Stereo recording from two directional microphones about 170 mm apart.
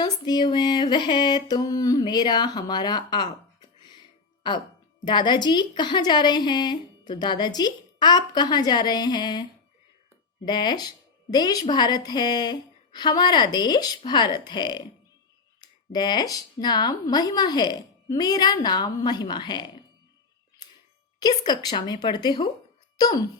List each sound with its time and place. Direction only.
0.0 s a woman's voice: 25° left (ahead or behind)
5.0 s a woman's voice: 25° left (ahead or behind)
21.2 s a woman's voice: 25° left (ahead or behind)